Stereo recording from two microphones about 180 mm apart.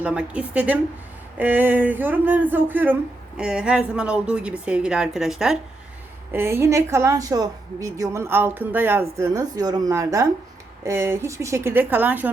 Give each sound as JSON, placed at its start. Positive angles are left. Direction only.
{"t": 0.0, "sound": "speech", "side_deg": -5}
{"t": 6.3, "sound": "speech", "side_deg": -15}